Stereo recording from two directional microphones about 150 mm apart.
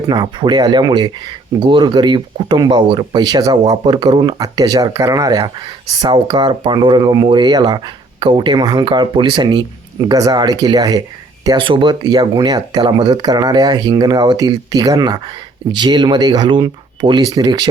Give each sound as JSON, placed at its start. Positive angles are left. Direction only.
{"t": 0.1, "sound": "speech", "side_deg": -30}